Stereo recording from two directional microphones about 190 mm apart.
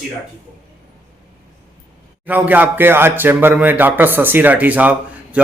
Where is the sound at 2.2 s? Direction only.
10° right (ahead or behind).